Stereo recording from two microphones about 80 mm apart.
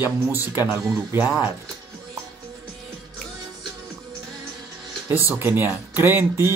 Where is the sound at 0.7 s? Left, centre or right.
Centre.